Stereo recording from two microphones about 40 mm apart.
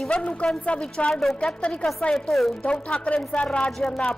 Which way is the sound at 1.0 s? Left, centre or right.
Centre.